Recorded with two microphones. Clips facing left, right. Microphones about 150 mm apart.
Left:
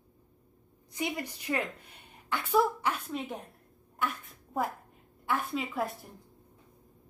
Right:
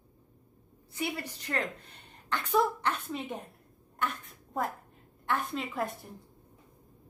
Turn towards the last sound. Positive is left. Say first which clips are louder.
# left 1 dB
turn(degrees=0)  # may be behind; listen again after turning